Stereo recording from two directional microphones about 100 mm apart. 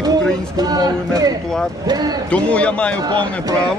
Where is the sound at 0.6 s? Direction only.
40° right (ahead or behind).